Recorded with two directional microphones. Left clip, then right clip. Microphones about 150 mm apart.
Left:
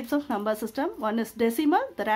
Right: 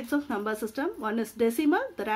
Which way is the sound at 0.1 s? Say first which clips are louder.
Left 3 dB; 30° left (ahead or behind).